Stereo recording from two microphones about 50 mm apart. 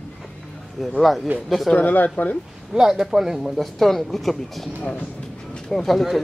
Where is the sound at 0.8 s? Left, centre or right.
Centre.